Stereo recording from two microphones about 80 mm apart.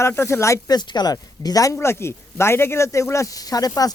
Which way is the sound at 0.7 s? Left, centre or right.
Left.